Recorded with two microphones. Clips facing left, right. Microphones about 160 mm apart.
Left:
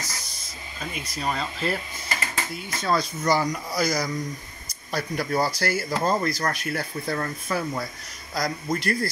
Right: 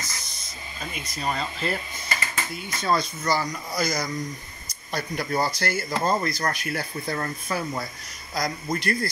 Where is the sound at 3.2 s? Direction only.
15° left (ahead or behind).